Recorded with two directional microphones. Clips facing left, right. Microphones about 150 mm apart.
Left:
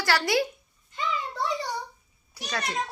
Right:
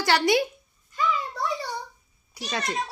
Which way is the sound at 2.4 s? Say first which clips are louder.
Right 3 dB; 15° right (ahead or behind).